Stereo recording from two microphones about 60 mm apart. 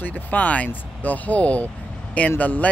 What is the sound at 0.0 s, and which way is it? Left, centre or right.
Speech, left.